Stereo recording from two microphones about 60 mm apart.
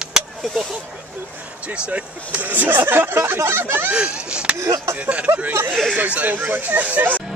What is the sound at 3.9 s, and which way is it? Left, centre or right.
Speech, centre.